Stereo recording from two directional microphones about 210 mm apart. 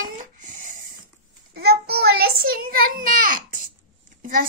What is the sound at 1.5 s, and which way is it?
A child's voice, 50° right (ahead or behind).